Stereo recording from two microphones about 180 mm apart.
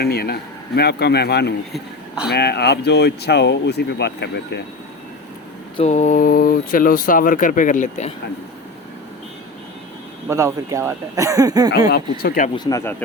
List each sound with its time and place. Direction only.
0.0 s speech: 60° left (ahead or behind)
1.7 s speech: 5° right (ahead or behind)
2.3 s speech: 65° left (ahead or behind)
5.7 s speech: 40° left (ahead or behind)
10.2 s speech: 15° right (ahead or behind)
11.9 s speech: 60° left (ahead or behind)
12.5 s speech: 20° left (ahead or behind)